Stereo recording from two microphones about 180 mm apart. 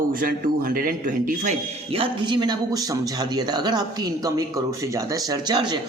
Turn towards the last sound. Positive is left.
turn(degrees=-25)  # may be behind; listen again after turning